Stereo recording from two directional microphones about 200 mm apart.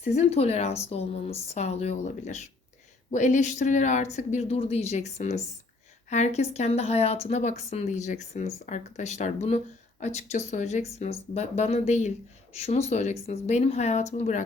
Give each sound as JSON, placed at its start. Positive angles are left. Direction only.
{"t": 0.1, "sound": "a woman's voice", "side_deg": 35}